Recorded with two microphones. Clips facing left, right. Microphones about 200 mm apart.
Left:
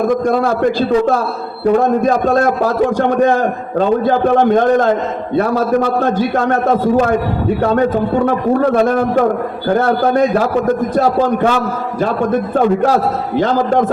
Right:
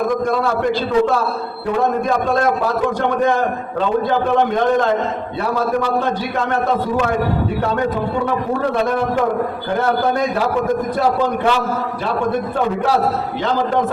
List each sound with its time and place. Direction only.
0.3 s a man's voice: 45° left (ahead or behind)
5.4 s a man's voice: 50° left (ahead or behind)
8.7 s a man's voice: 45° left (ahead or behind)
12.8 s a man's voice: 45° left (ahead or behind)